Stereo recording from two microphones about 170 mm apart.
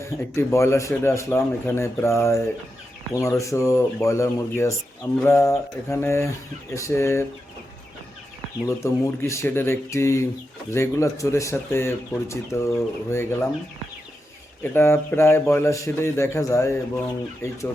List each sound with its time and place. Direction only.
0.3 s speech: 15° left (ahead or behind)
8.6 s speech: 15° left (ahead or behind)
14.6 s speech: 15° left (ahead or behind)